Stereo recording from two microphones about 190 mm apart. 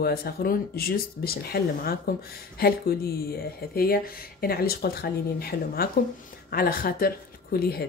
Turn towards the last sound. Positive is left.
turn(degrees=55)  # may be behind; listen again after turning